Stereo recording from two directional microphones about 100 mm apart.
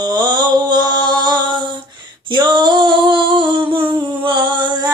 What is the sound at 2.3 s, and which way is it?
Female singing, 50° right (ahead or behind).